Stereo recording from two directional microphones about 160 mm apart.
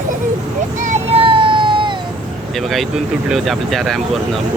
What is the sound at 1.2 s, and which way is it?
Emergency vehicle, 30° right (ahead or behind).